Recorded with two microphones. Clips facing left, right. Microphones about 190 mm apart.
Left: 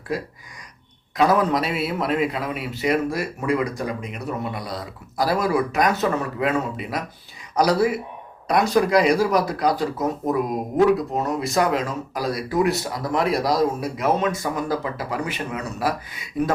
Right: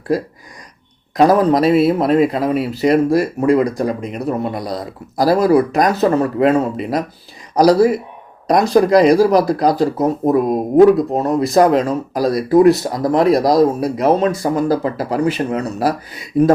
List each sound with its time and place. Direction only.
1.1 s a man's voice: 40° right (ahead or behind)